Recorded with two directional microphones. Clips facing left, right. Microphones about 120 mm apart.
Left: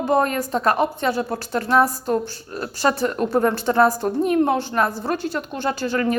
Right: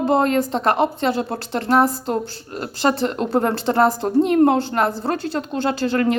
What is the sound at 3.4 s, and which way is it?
Speech, 40° right (ahead or behind).